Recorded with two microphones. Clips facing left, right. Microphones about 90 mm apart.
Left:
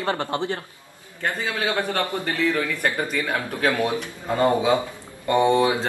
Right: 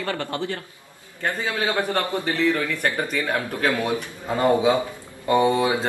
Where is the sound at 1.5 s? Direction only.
20° right (ahead or behind).